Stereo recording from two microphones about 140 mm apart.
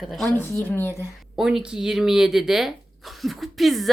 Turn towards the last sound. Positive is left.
turn(degrees=0)  # may be behind; listen again after turning